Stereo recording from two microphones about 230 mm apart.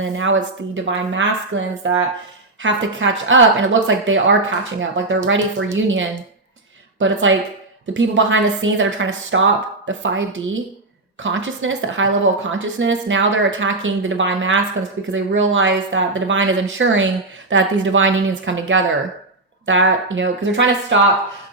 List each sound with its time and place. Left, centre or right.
0.0 s speech: right